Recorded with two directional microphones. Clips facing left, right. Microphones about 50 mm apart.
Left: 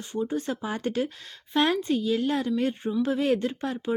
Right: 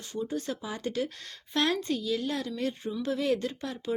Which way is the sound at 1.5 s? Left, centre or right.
Left.